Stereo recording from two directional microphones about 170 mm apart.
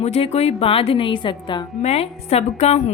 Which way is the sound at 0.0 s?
40° left (ahead or behind).